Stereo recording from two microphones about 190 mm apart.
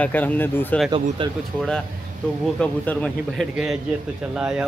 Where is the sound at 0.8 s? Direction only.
25° right (ahead or behind).